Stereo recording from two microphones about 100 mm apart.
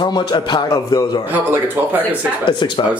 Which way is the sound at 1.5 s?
20° right (ahead or behind).